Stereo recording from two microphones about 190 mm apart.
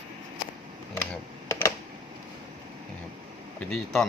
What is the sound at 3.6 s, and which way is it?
Speech, 5° left (ahead or behind).